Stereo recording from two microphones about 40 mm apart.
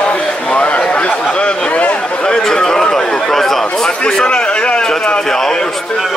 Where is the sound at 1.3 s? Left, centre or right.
Left.